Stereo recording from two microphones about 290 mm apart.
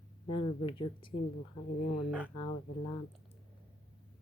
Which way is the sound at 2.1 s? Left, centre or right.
Centre.